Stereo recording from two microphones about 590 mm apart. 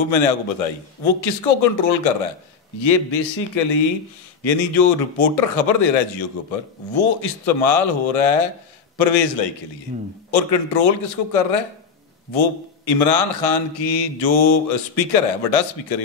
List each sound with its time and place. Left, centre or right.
0.0 s speech: left